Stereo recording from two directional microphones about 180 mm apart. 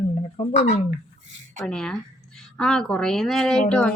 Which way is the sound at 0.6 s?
40° left (ahead or behind).